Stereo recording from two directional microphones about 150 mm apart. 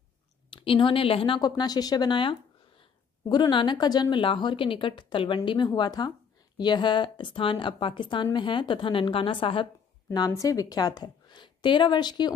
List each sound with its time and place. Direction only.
0.5 s a woman's voice: 35° left (ahead or behind)
10.1 s a woman's voice: 25° left (ahead or behind)